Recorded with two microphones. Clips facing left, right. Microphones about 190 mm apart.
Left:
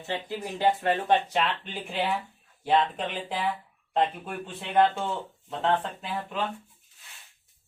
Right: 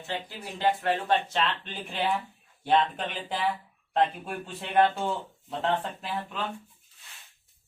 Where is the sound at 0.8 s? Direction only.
20° left (ahead or behind); by 6.4 s centre (ahead or behind).